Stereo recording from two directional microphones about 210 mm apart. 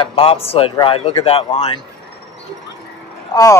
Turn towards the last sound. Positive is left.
turn(degrees=15)  # may be behind; listen again after turning